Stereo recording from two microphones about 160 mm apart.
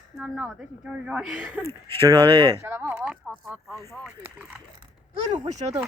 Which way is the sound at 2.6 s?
15° right (ahead or behind).